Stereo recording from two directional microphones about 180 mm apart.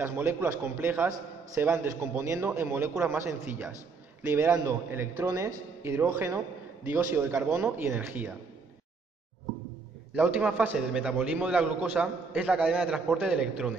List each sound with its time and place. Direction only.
0.0 s a man's voice: 15° right (ahead or behind)
10.1 s a man's voice: 5° right (ahead or behind)